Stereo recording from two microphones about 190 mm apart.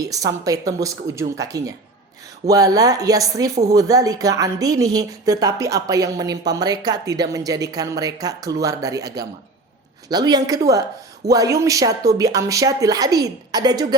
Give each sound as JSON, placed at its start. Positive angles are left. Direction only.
{"t": 0.0, "sound": "a woman's voice", "side_deg": -20}